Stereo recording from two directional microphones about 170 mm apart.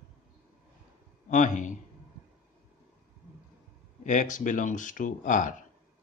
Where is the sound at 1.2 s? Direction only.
45° left (ahead or behind).